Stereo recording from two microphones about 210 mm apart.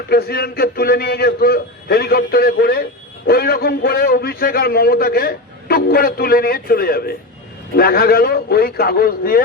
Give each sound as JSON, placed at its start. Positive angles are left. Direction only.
{"t": 0.1, "sound": "a man's voice", "side_deg": 50}